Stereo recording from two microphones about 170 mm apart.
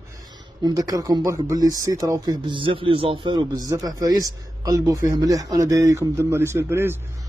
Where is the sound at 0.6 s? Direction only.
25° right (ahead or behind).